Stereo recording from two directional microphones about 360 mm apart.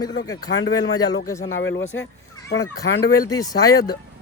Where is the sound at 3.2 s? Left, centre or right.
Centre.